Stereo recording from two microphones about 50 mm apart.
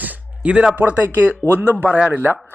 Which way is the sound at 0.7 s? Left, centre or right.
Right.